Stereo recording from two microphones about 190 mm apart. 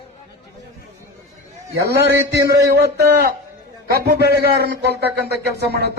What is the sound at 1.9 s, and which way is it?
A man's voice, 55° right (ahead or behind).